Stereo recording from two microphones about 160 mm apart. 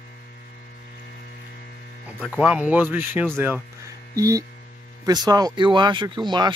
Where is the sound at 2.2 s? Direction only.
5° right (ahead or behind).